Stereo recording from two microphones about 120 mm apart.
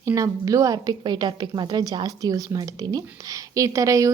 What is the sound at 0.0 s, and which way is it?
A woman's voice, 25° right (ahead or behind).